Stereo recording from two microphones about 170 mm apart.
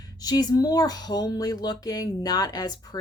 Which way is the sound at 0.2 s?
25° left (ahead or behind).